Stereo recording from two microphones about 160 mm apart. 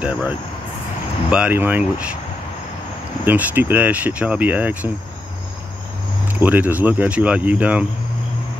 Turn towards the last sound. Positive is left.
turn(degrees=-10)  # may be behind; listen again after turning